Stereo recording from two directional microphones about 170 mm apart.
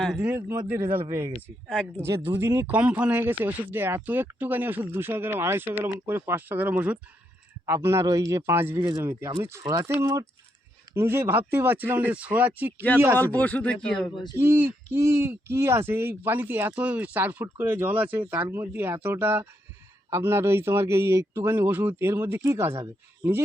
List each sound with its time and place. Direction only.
0.0 s speech: centre (ahead or behind)
0.3 s speech: 15° right (ahead or behind)
1.7 s a man's voice: 5° left (ahead or behind)
2.0 s speech: 15° right (ahead or behind)
13.1 s a man's voice: 10° left (ahead or behind)
14.3 s speech: 15° right (ahead or behind)